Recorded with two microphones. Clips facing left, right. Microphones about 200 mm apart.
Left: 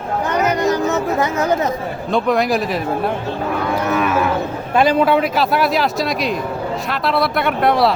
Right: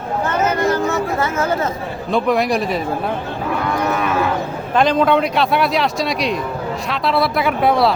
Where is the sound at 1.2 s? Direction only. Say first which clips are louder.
Left 2 dB; 15° left (ahead or behind).